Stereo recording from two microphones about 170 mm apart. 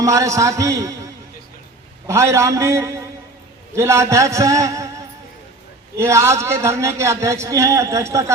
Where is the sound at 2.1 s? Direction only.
15° right (ahead or behind).